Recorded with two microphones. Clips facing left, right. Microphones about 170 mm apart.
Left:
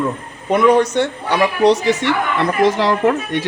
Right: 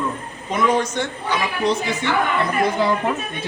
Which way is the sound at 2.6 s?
90° left.